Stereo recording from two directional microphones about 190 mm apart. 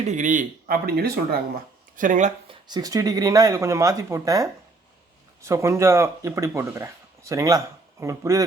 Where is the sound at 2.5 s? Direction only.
20° right (ahead or behind).